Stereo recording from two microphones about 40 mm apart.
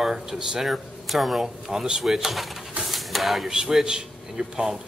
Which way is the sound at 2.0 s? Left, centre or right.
Centre.